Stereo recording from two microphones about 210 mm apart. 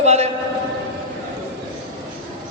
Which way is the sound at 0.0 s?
30° right (ahead or behind).